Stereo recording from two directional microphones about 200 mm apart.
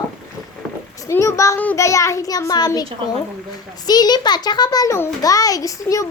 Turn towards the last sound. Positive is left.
turn(degrees=15)  # may be behind; listen again after turning